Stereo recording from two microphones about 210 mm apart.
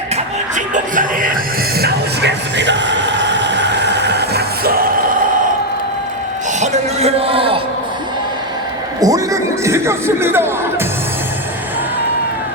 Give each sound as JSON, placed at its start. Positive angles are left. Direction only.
{"t": 0.5, "sound": "music", "side_deg": -40}
{"t": 1.8, "sound": "music", "side_deg": -55}
{"t": 6.6, "sound": "a sound", "side_deg": -30}
{"t": 9.0, "sound": "music", "side_deg": -15}